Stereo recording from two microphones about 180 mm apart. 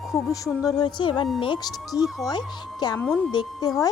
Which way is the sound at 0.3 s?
20° left (ahead or behind).